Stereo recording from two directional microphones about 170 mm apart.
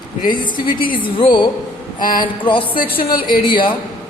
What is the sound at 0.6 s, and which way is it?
Music, 55° left (ahead or behind).